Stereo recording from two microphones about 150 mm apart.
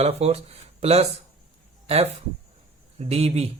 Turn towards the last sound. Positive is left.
turn(degrees=-45)  # may be behind; listen again after turning